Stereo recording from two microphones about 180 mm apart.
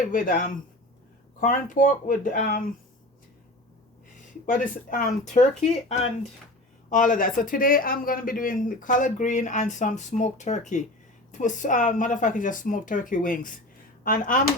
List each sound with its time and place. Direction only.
0.1 s speech: 50° left (ahead or behind)
4.4 s speech: 50° left (ahead or behind)
6.9 s speech: 45° left (ahead or behind)